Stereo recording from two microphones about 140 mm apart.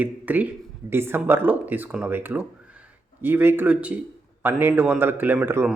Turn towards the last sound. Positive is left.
turn(degrees=-15)  # may be behind; listen again after turning